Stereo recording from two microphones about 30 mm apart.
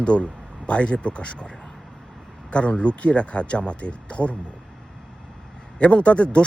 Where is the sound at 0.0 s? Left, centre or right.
Left.